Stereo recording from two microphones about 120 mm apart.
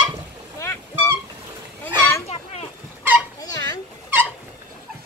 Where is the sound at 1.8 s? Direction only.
25° left (ahead or behind).